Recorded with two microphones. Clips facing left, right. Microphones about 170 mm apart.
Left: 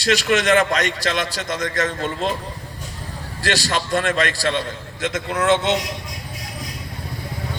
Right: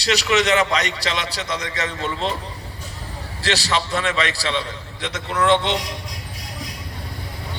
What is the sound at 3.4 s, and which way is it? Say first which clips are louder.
A man's voice: even; 50° left (ahead or behind).